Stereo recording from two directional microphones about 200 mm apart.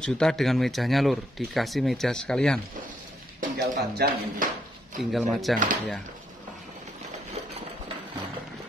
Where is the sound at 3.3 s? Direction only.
45° right (ahead or behind).